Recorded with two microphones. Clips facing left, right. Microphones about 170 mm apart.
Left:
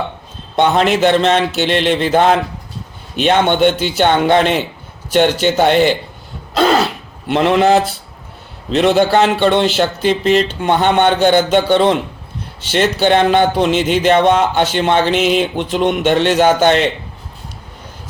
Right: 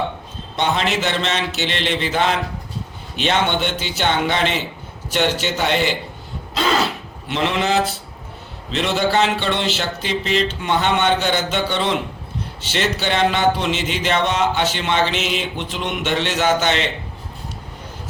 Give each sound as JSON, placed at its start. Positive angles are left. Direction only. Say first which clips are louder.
{"t": 0.5, "sound": "a man's voice", "louder": "left 7 dB", "side_deg": 50}
{"t": 6.5, "sound": "throat clearing", "louder": "left 7 dB", "side_deg": 55}
{"t": 7.3, "sound": "a man's voice", "louder": "left 9 dB", "side_deg": 50}